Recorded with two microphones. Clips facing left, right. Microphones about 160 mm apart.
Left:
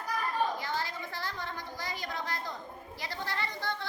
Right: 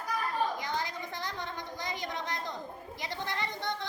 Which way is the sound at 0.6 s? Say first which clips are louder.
Even; 20° right (ahead or behind).